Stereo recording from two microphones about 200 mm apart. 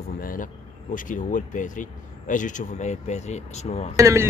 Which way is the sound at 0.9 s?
40° left (ahead or behind).